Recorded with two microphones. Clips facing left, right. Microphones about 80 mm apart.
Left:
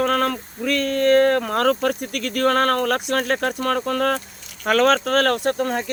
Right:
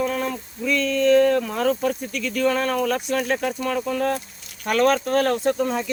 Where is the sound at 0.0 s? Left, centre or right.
Left.